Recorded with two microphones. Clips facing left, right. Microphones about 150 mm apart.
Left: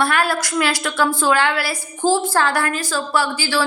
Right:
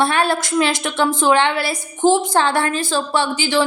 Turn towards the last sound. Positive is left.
turn(degrees=-20)  # may be behind; listen again after turning